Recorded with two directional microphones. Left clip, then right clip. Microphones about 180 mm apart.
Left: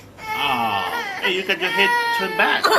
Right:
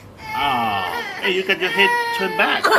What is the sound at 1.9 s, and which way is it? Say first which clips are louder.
Cat: left 1 dB; 40° left (ahead or behind).